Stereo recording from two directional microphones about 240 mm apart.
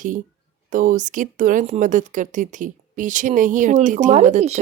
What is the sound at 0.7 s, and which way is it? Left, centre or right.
A woman's voice, right.